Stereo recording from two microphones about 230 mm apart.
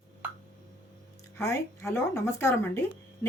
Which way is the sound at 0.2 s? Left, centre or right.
Centre.